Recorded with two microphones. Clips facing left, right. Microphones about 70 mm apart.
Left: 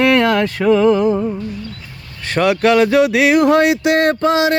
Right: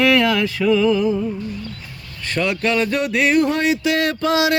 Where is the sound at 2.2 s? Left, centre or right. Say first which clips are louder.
Left 7 dB; left.